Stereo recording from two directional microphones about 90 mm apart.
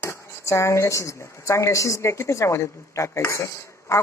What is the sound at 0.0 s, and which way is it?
Speech, 30° left (ahead or behind).